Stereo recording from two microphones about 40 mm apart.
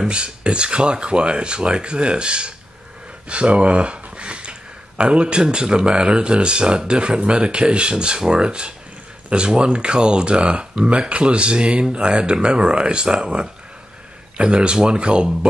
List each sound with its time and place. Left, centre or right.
0.1 s speech: right